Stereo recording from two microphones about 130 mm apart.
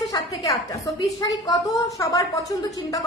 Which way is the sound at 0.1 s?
25° left (ahead or behind).